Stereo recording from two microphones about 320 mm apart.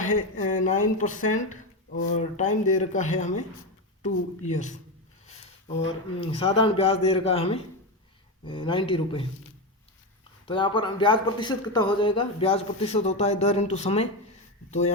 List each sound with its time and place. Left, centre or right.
0.0 s speech: left
6.1 s speech: centre
10.4 s speech: centre